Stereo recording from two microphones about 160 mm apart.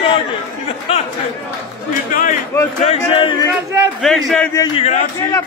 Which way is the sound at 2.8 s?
40° left (ahead or behind).